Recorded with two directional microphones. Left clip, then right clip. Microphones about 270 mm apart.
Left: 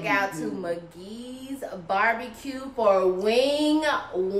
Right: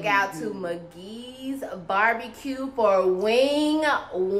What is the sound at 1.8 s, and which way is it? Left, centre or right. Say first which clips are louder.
A woman's voice: right 1 dB; centre.